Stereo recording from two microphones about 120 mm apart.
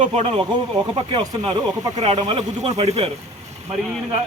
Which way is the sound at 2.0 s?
60° right (ahead or behind).